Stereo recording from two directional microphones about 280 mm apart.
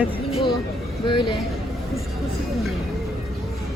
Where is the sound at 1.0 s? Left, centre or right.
Centre.